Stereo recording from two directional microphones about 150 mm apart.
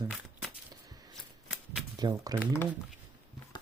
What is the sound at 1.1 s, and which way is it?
Typewriter, centre (ahead or behind).